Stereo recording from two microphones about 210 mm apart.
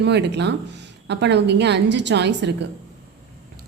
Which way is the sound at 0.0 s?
55° right (ahead or behind).